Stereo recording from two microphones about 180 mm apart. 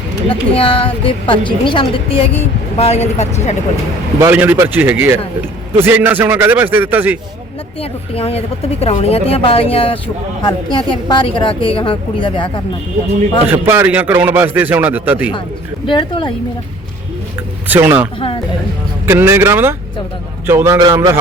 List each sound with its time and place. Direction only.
0.3 s a woman's voice: 30° left (ahead or behind)
4.2 s speech: 10° right (ahead or behind)
7.8 s a woman's voice: 35° left (ahead or behind)
13.5 s speech: 10° right (ahead or behind)
15.9 s a woman's voice: 30° left (ahead or behind)
17.7 s speech: 10° right (ahead or behind)